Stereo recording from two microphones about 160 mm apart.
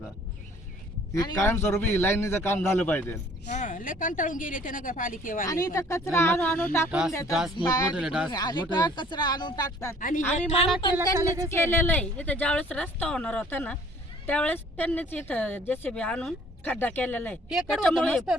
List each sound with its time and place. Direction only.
1.1 s a woman's voice: 20° left (ahead or behind)
3.5 s a woman's voice: 50° left (ahead or behind)
5.5 s a woman's voice: 20° left (ahead or behind)
7.3 s speech: centre (ahead or behind)
8.3 s speech: 25° left (ahead or behind)
10.4 s a woman's voice: 40° left (ahead or behind)
10.9 s speech: 20° right (ahead or behind)
11.4 s a woman's voice: 15° left (ahead or behind)
17.5 s speech: centre (ahead or behind)